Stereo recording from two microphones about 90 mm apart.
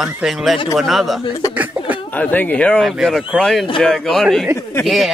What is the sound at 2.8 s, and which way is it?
A man's voice, centre (ahead or behind).